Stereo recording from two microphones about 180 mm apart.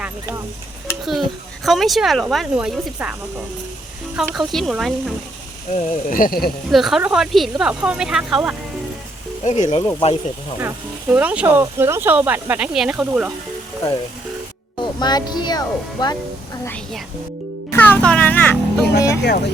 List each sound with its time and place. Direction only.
0.0 s speech: 15° right (ahead or behind)
1.0 s speech: centre (ahead or behind)
4.3 s speech: centre (ahead or behind)
5.7 s speech: 50° left (ahead or behind)
6.7 s speech: centre (ahead or behind)
9.4 s speech: 40° left (ahead or behind)
11.1 s speech: 10° right (ahead or behind)
14.8 s speech: 25° left (ahead or behind)
16.6 s speech: 5° left (ahead or behind)
17.7 s music: 10° left (ahead or behind)